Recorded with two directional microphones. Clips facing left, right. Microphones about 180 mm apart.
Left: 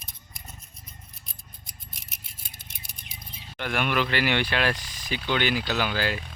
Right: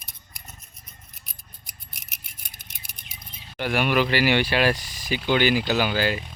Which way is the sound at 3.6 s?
5° right (ahead or behind).